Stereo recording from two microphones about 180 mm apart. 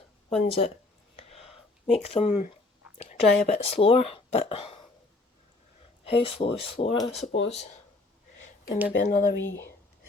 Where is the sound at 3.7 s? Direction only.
30° left (ahead or behind).